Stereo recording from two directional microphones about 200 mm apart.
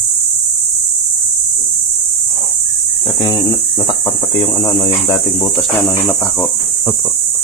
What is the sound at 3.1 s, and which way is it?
Speech, 20° left (ahead or behind).